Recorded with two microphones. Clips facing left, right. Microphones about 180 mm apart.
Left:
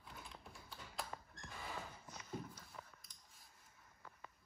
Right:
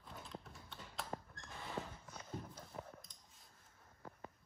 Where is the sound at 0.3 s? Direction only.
Centre (ahead or behind).